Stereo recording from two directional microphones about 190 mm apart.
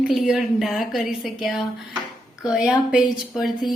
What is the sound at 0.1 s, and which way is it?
Speech, centre (ahead or behind).